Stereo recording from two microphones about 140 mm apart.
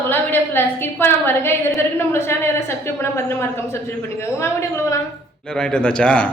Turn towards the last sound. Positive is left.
turn(degrees=10)  # may be behind; listen again after turning